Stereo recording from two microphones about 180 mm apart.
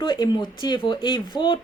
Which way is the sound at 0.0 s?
25° left (ahead or behind).